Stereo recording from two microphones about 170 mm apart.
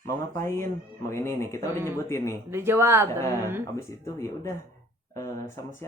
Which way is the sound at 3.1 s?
15° left (ahead or behind).